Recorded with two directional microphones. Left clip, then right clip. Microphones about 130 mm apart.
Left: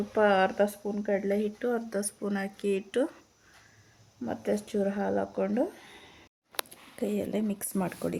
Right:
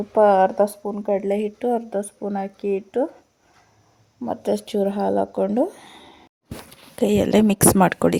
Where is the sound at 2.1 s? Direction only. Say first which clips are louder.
Right 7 dB; 30° right (ahead or behind).